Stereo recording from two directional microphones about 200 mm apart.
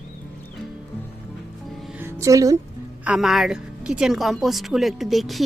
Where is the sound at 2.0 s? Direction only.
15° right (ahead or behind).